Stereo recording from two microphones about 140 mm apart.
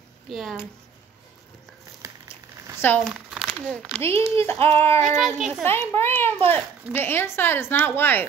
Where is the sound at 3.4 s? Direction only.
5° left (ahead or behind).